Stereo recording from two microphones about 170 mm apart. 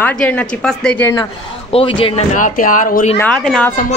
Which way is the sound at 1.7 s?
35° left (ahead or behind).